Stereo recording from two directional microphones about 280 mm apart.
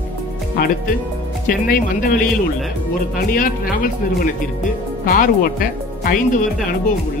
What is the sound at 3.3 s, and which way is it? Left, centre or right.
Speech, left.